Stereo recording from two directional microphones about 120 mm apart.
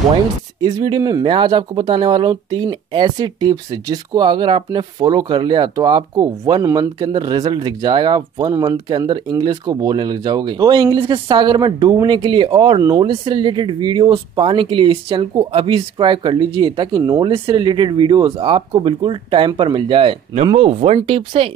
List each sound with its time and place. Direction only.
0.1 s speech: 35° right (ahead or behind)
12.8 s speech: 30° right (ahead or behind)
13.1 s speech: 45° right (ahead or behind)
17.2 s speech: 50° right (ahead or behind)